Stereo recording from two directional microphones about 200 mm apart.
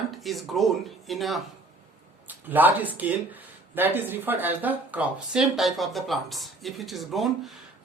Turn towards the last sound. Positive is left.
turn(degrees=0)  # may be behind; listen again after turning